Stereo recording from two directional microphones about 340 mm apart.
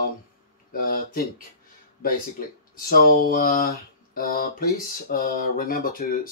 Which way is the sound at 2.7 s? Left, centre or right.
Left.